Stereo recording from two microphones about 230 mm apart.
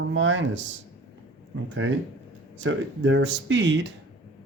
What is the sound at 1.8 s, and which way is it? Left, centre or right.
Speech, right.